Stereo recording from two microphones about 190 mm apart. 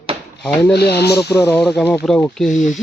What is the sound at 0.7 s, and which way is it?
Speech, 60° left (ahead or behind).